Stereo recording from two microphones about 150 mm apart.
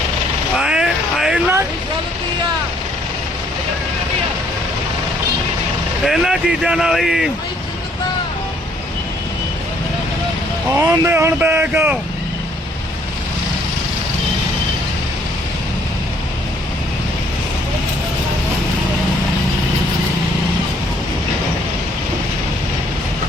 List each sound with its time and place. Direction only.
0.6 s a sound: 5° right (ahead or behind)
6.1 s speech: centre (ahead or behind)
10.8 s speech: 15° right (ahead or behind)